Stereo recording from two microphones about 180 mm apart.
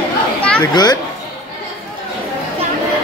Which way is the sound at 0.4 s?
5° left (ahead or behind).